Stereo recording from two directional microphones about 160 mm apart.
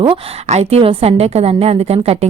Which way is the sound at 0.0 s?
35° right (ahead or behind).